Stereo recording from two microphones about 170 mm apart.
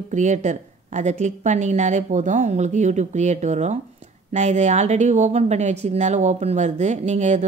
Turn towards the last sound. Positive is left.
turn(degrees=-45)  # may be behind; listen again after turning